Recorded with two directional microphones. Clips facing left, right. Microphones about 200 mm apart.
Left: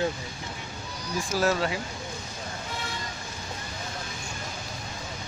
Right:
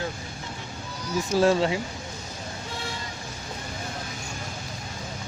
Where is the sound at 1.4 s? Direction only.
25° right (ahead or behind).